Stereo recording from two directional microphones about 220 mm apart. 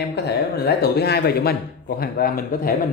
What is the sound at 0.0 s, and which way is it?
Speech, 45° left (ahead or behind).